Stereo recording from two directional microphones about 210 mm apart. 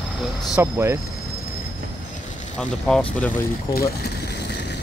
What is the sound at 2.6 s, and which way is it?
Speech, 5° left (ahead or behind).